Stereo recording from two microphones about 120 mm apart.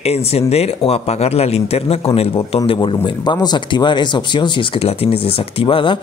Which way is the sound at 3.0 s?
35° left (ahead or behind).